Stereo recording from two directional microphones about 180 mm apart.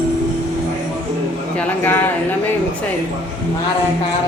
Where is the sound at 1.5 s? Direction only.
10° left (ahead or behind).